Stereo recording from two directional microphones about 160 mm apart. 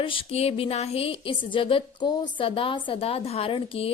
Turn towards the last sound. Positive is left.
turn(degrees=35)  # may be behind; listen again after turning